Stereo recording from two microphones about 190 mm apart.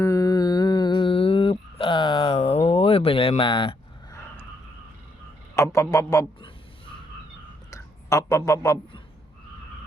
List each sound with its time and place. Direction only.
0.0 s mantra: 15° left (ahead or behind)
5.5 s a man's voice: 15° left (ahead or behind)